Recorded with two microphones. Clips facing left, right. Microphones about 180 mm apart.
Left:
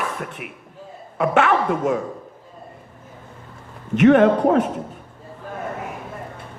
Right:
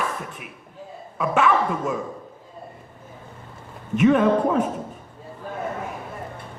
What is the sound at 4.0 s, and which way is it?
Speech, 70° left (ahead or behind).